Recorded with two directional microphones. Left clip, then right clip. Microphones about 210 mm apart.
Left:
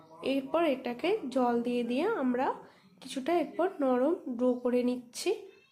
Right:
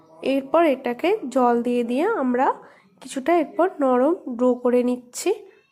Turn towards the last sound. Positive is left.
turn(degrees=-25)  # may be behind; listen again after turning